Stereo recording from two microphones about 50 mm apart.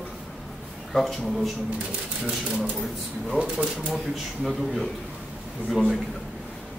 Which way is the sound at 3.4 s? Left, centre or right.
Right.